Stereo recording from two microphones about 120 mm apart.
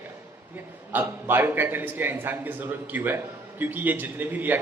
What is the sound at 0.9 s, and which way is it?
A man's voice, 15° right (ahead or behind).